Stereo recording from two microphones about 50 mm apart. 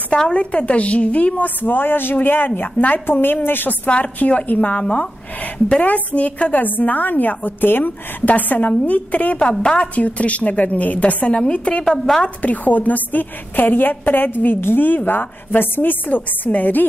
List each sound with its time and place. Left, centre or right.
0.3 s a woman's voice: left
3.8 s a woman's voice: left
12.4 s a woman's voice: left